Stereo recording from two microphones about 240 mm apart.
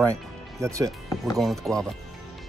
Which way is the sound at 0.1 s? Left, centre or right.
Centre.